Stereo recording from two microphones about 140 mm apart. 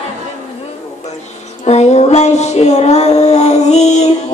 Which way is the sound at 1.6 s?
55° left (ahead or behind).